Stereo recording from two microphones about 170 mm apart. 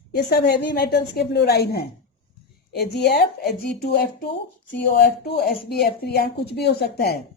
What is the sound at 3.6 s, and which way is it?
A woman's voice, 60° left (ahead or behind).